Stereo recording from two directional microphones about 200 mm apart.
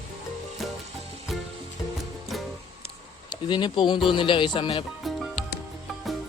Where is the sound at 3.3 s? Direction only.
20° left (ahead or behind).